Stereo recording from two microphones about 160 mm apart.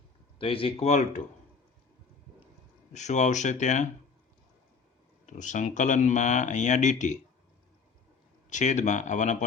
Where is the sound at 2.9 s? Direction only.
50° left (ahead or behind).